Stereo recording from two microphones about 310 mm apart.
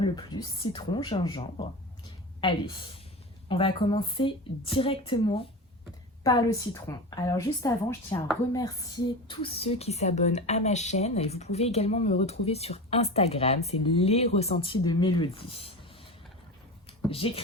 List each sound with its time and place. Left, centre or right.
0.0 s speech: centre
17.1 s speech: centre